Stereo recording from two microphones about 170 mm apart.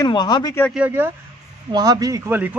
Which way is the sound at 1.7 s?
20° right (ahead or behind).